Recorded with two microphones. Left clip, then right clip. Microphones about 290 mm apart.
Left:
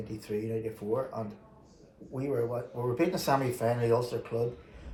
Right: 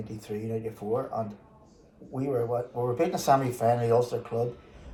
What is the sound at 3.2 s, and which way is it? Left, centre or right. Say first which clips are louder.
Speech: right 5 dB; centre.